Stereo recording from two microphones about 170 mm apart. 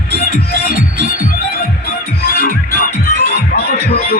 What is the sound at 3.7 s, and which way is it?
Music, 35° left (ahead or behind).